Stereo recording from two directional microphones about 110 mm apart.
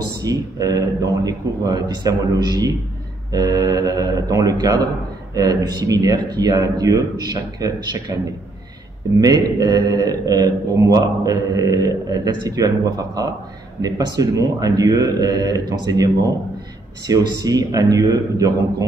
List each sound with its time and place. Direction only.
0.2 s mantra: 35° right (ahead or behind)
9.2 s mantra: 35° right (ahead or behind)